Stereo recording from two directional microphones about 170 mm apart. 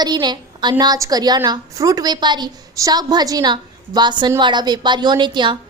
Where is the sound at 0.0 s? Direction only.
25° right (ahead or behind).